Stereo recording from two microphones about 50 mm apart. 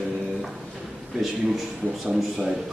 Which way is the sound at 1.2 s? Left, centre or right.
Centre.